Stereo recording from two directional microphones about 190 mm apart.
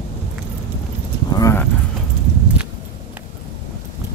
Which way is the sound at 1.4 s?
10° left (ahead or behind).